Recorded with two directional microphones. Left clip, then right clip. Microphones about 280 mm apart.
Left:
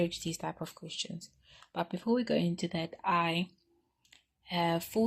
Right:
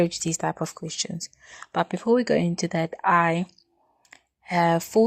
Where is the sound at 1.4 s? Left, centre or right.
Right.